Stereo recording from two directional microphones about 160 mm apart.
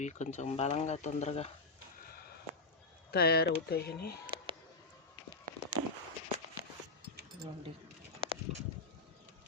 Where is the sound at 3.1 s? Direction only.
80° left.